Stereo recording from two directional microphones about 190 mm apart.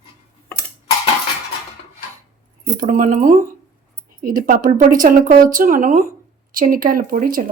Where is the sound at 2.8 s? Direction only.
40° right (ahead or behind).